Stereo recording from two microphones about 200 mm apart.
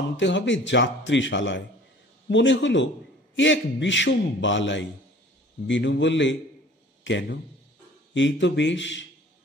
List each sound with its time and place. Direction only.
0.2 s a man's voice: 65° left (ahead or behind)